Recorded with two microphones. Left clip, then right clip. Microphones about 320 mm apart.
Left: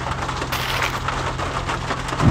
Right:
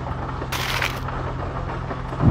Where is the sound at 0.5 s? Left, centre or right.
Centre.